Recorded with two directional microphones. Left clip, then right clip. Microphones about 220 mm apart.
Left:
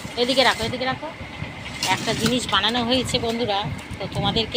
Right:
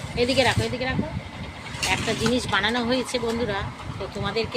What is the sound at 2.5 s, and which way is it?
Speech, 20° right (ahead or behind).